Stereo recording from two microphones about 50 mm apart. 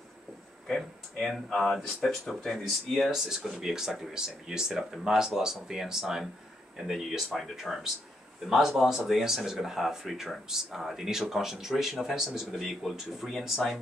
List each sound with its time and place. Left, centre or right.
0.7 s speech: centre